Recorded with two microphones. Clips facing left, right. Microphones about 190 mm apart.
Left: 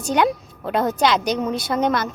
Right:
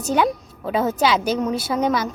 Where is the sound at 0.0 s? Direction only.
5° right (ahead or behind).